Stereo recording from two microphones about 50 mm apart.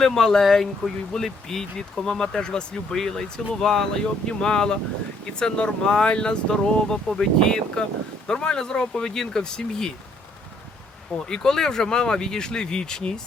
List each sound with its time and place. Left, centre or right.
0.0 s speech: centre
11.3 s speech: centre